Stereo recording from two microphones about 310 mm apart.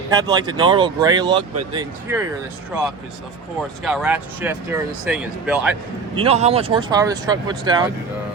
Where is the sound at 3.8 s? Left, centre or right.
Centre.